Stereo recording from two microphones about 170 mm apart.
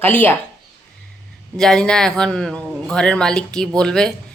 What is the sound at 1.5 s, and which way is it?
A woman's voice, 5° left (ahead or behind).